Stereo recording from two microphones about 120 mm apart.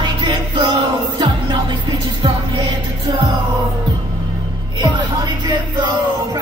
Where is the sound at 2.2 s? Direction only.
40° right (ahead or behind).